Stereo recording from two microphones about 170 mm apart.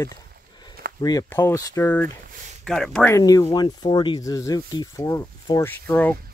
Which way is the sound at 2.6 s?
Centre (ahead or behind).